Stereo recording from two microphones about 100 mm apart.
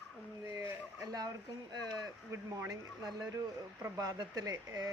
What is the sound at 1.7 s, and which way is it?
Speech, 40° right (ahead or behind).